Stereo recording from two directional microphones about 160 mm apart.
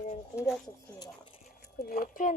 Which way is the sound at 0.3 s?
Centre (ahead or behind).